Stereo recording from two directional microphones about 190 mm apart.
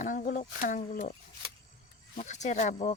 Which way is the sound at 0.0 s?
45° left (ahead or behind).